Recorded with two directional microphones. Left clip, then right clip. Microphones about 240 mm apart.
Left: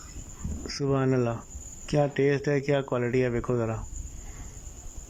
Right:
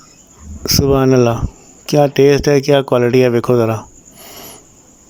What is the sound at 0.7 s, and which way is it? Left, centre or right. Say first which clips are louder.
Speech: right 15 dB; right.